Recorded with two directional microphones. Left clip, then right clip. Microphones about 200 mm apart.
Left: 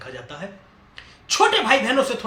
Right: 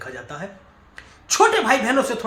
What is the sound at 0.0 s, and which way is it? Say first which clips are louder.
Speech: right 2 dB; 20° right (ahead or behind).